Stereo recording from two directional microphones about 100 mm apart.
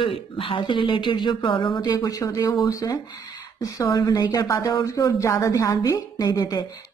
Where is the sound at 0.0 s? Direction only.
65° left (ahead or behind).